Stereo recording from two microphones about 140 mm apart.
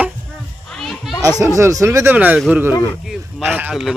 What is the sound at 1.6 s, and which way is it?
Speech, 20° right (ahead or behind).